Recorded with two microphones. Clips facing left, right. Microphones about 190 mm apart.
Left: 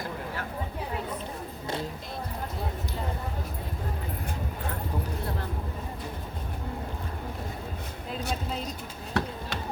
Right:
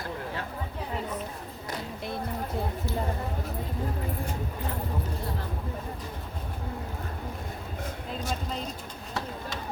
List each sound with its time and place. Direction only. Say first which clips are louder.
9.2 s basketball bounce: left 5 dB; 65° left (ahead or behind)